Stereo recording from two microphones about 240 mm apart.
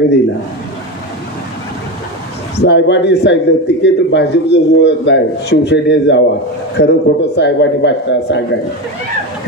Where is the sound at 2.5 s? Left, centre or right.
Left.